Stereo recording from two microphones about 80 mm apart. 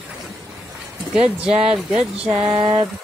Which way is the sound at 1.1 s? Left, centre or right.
Centre.